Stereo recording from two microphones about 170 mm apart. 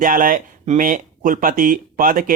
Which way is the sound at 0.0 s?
55° right (ahead or behind).